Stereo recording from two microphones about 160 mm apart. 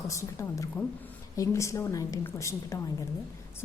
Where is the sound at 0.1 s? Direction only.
20° left (ahead or behind).